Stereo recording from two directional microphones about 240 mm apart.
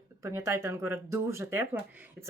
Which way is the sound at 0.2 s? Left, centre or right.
Centre.